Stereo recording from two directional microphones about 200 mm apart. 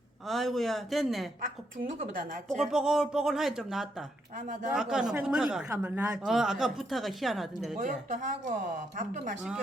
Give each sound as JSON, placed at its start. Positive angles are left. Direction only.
{"t": 0.3, "sound": "speech", "side_deg": 0}
{"t": 2.1, "sound": "speech", "side_deg": -40}
{"t": 2.6, "sound": "speech", "side_deg": 0}
{"t": 7.8, "sound": "speech", "side_deg": -40}